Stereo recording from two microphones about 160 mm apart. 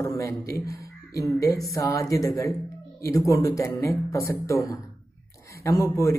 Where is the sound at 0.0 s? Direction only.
20° left (ahead or behind).